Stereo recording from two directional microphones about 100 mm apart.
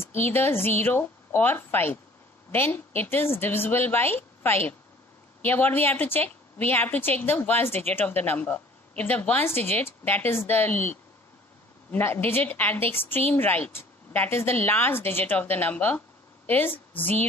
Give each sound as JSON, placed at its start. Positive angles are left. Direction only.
{"t": 0.0, "sound": "a woman's voice", "side_deg": 25}